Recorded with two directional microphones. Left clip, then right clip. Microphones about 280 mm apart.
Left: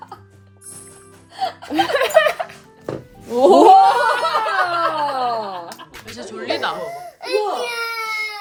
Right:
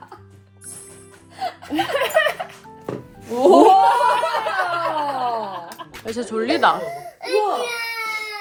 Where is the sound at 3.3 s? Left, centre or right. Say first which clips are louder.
Left 1 dB; left.